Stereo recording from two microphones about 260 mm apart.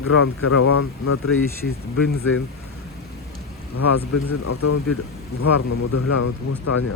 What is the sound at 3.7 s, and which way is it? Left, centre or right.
Speech, left.